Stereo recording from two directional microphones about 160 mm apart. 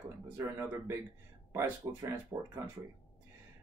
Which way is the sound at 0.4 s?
15° right (ahead or behind).